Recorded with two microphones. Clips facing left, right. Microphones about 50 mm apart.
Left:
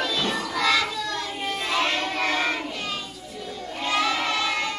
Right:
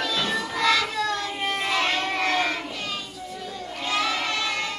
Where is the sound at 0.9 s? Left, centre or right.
Right.